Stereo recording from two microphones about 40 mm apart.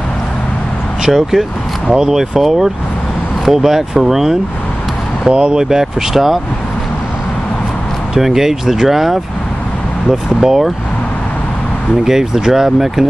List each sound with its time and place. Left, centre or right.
1.0 s speech: centre
5.3 s speech: right
5.6 s speech: centre
8.1 s speech: centre
12.0 s speech: centre